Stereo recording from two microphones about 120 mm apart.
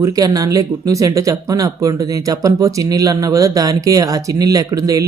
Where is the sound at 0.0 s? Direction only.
30° right (ahead or behind).